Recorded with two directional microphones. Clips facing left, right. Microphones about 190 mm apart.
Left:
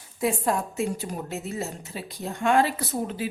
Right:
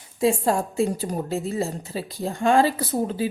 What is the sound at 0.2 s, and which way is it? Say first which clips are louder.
A woman's voice: right 4 dB; 30° right (ahead or behind).